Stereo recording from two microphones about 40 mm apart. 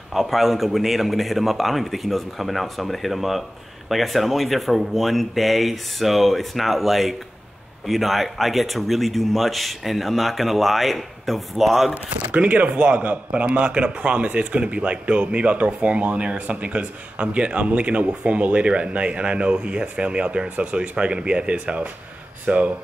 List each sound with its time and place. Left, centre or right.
0.1 s speech: centre
12.1 s speech: right